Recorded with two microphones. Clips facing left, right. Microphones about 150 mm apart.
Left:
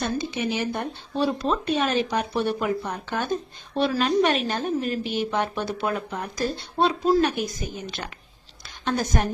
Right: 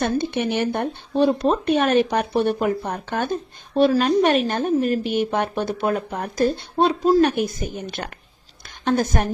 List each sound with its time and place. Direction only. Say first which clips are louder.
0.0 s a woman's voice: right 5 dB; 60° right (ahead or behind)